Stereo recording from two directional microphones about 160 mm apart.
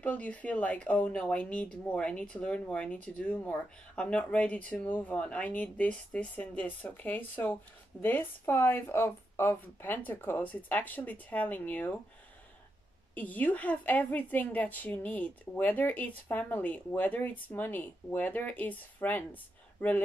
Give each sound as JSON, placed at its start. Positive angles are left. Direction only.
{"t": 0.0, "sound": "speech", "side_deg": 10}
{"t": 13.1, "sound": "speech", "side_deg": 10}